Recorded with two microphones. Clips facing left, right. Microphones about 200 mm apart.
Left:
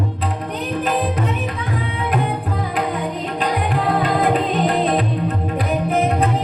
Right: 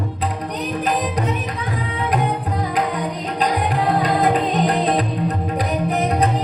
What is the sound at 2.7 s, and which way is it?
Music, 40° right (ahead or behind).